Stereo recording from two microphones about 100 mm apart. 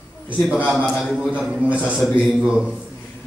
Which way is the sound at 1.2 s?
10° right (ahead or behind).